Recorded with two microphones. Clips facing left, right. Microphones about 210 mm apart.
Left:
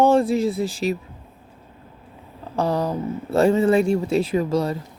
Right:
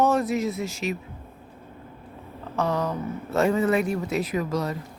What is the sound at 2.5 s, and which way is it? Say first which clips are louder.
Speech: left 3 dB; 35° left (ahead or behind).